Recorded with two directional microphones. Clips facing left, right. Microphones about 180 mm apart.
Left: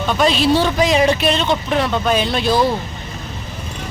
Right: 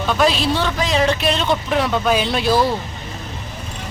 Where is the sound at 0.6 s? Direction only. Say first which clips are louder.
Left 4 dB; 15° left (ahead or behind); by 2.6 s 5° right (ahead or behind).